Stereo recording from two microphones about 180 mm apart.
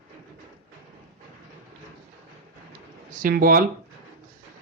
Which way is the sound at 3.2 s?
55° right (ahead or behind).